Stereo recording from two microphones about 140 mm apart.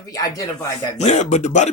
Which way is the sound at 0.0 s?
25° left (ahead or behind).